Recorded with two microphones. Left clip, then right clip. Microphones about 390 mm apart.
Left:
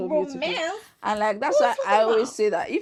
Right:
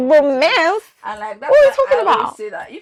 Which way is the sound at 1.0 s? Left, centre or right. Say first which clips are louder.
Left 2 dB; left.